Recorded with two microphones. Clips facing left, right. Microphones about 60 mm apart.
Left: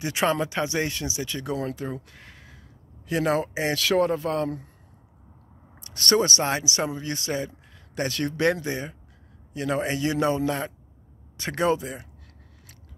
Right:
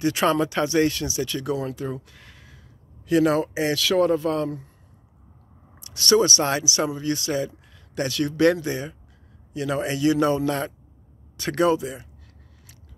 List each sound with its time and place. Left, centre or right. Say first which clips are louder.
0.0 s speech: right 3 dB; centre
5.8 s speech: right 3 dB; left